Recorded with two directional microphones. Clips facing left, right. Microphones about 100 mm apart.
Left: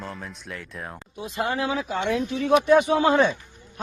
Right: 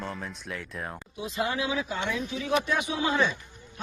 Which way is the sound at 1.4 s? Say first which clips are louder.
Left 3 dB; 45° left (ahead or behind).